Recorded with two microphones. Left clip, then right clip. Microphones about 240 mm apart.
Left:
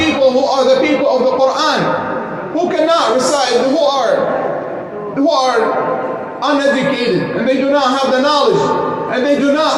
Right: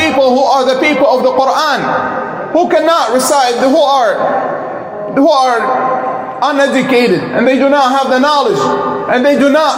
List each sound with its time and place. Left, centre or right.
0.2 s music: right
2.6 s a sound: right
5.1 s a woman's voice: right